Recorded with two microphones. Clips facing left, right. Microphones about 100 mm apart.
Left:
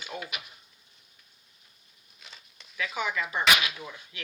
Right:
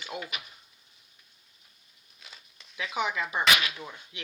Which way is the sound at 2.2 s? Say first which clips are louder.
Left 1 dB; centre (ahead or behind).